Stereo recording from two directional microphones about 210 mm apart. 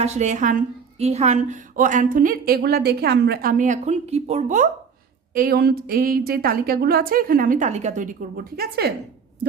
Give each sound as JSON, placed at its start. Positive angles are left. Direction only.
{"t": 0.0, "sound": "a woman's voice", "side_deg": -35}